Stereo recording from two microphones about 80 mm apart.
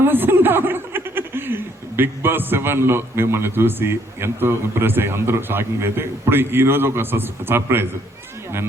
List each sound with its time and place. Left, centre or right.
0.0 s speech: right